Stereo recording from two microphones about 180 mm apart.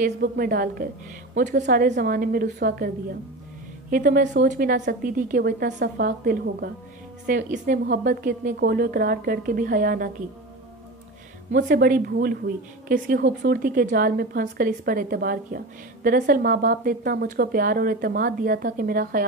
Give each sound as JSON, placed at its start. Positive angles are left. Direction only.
{"t": 0.0, "sound": "a woman's voice", "side_deg": -60}
{"t": 1.4, "sound": "a woman's voice", "side_deg": -45}
{"t": 3.9, "sound": "a woman's voice", "side_deg": -50}
{"t": 7.2, "sound": "a woman's voice", "side_deg": -45}
{"t": 11.5, "sound": "a woman's voice", "side_deg": -55}
{"t": 13.2, "sound": "speech", "side_deg": -80}
{"t": 13.6, "sound": "a woman's voice", "side_deg": -55}